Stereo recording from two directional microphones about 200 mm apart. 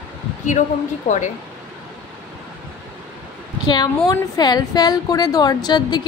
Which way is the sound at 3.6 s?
20° left (ahead or behind).